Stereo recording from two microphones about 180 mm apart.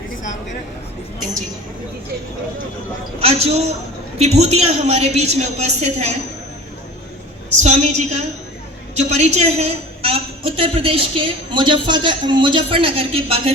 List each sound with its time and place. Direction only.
3.2 s a man's voice: 35° right (ahead or behind)
7.6 s a woman's voice: 40° right (ahead or behind)